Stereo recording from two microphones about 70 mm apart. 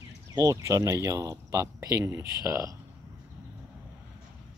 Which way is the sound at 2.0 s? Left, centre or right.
Right.